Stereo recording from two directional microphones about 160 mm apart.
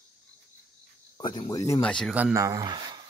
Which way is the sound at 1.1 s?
30° left (ahead or behind).